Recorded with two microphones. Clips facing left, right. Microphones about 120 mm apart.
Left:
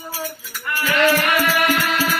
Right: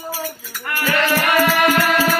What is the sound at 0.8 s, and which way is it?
Music, 40° right (ahead or behind).